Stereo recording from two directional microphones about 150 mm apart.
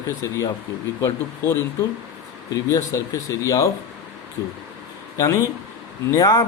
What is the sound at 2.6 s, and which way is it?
A man's voice, 20° left (ahead or behind).